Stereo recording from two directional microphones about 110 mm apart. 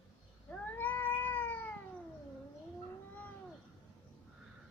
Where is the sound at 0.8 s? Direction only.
15° left (ahead or behind).